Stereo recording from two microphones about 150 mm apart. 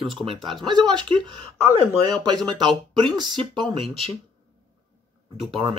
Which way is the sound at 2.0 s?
30° right (ahead or behind).